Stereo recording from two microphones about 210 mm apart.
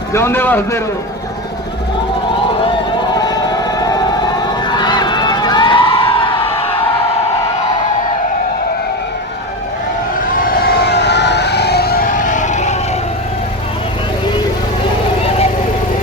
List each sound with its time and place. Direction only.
0.1 s a man's voice: 10° left (ahead or behind)
3.2 s siren: 20° left (ahead or behind)
4.4 s emergency vehicle: 20° left (ahead or behind)
10.3 s fire engine: 45° left (ahead or behind)